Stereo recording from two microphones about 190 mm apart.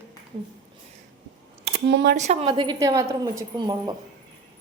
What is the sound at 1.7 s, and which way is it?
Speech, 65° right (ahead or behind).